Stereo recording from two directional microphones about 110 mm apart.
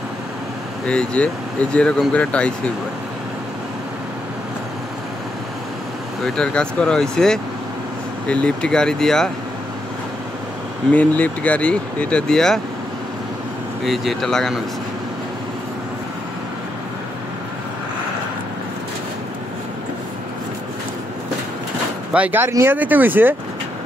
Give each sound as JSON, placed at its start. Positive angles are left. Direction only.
{"t": 0.8, "sound": "speech", "side_deg": 10}
{"t": 6.2, "sound": "speech", "side_deg": 5}
{"t": 10.9, "sound": "speech", "side_deg": 15}
{"t": 13.8, "sound": "speech", "side_deg": 0}
{"t": 22.1, "sound": "speech", "side_deg": -15}